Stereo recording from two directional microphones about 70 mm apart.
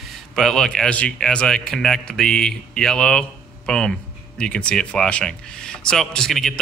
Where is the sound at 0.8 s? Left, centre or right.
Centre.